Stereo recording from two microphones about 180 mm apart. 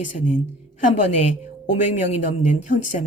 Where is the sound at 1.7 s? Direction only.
45° left (ahead or behind).